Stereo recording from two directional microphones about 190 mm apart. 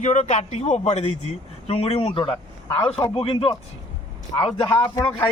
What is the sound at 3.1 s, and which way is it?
Speech, 30° left (ahead or behind).